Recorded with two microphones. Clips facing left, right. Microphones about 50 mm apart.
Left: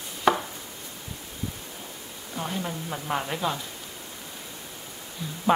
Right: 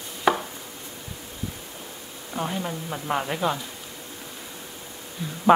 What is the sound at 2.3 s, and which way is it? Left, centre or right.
A woman's voice, centre.